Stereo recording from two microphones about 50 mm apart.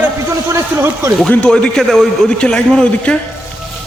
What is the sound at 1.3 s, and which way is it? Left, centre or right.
Speech, left.